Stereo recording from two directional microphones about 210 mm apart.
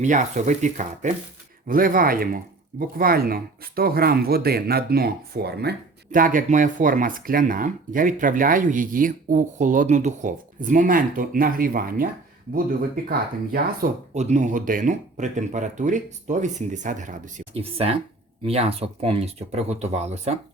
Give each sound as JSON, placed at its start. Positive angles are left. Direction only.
{"t": 0.0, "sound": "speech", "side_deg": -35}
{"t": 13.1, "sound": "speech", "side_deg": -45}
{"t": 14.1, "sound": "speech", "side_deg": -35}